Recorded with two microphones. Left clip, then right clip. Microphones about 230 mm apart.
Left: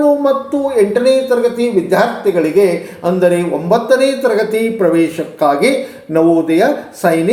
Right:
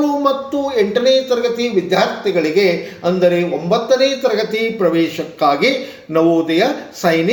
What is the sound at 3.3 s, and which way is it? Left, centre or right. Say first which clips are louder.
Speech: left 3 dB; centre.